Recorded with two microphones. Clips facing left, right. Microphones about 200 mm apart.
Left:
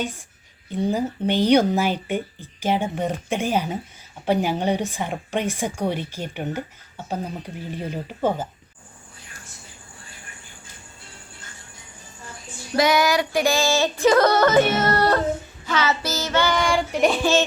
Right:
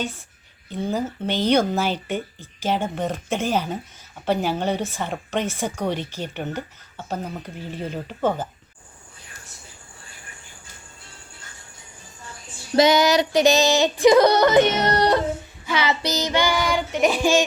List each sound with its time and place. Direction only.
0.8 s a woman's voice: 15° left (ahead or behind)
12.7 s yodeling: 20° right (ahead or behind)
15.6 s child singing: 15° right (ahead or behind)